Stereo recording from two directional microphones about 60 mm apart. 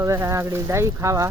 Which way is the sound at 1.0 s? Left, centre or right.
Right.